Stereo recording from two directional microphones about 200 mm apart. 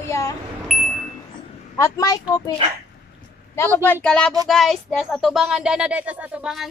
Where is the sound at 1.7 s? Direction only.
15° left (ahead or behind).